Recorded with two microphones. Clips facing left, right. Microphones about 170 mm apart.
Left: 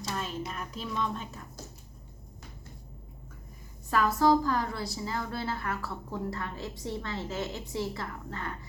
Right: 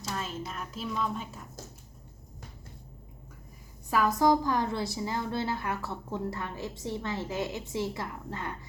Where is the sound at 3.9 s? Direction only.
10° right (ahead or behind).